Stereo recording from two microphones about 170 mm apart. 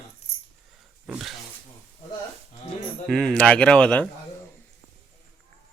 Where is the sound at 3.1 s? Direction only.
5° left (ahead or behind).